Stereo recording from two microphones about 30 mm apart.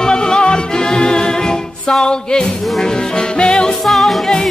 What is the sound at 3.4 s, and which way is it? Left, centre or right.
Music, left.